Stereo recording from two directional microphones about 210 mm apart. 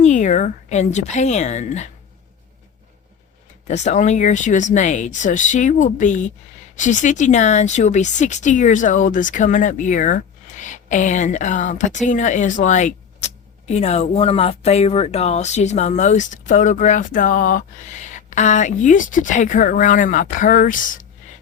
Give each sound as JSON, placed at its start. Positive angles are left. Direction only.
{"t": 0.0, "sound": "a woman's voice", "side_deg": 35}
{"t": 3.7, "sound": "speech", "side_deg": 35}